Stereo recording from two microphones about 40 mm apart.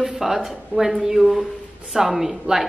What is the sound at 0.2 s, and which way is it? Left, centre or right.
A woman's voice, centre.